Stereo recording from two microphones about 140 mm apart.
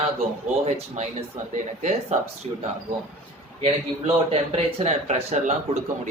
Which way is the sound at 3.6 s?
45° right (ahead or behind).